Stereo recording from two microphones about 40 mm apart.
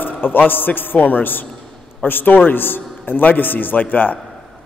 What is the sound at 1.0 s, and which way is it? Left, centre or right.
A man's voice, left.